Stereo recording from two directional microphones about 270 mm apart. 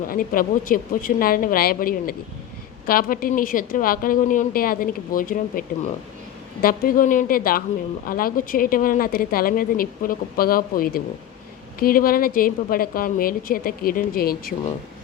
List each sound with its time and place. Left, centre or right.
0.1 s speech: left